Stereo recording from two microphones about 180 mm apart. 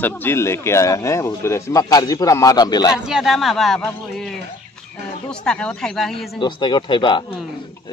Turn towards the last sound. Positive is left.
turn(degrees=25)  # may be behind; listen again after turning